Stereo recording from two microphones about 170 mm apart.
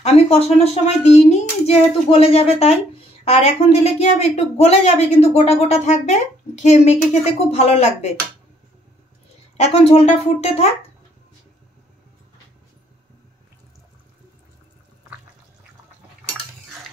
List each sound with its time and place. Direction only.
0.0 s speech: 40° left (ahead or behind)
9.6 s speech: 35° left (ahead or behind)